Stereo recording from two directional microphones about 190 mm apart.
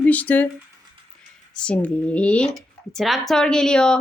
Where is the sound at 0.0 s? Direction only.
10° left (ahead or behind).